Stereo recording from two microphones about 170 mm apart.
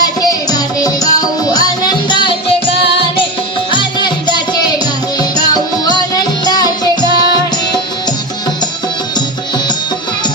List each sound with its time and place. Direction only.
0.0 s music: 20° left (ahead or behind)
5.8 s music: 25° left (ahead or behind)